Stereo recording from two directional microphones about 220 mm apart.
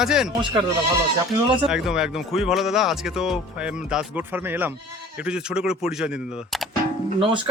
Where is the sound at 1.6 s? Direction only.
Centre (ahead or behind).